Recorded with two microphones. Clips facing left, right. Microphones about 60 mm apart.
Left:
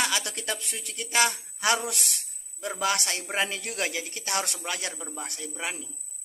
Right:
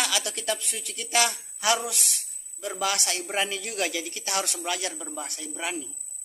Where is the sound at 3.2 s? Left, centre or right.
Left.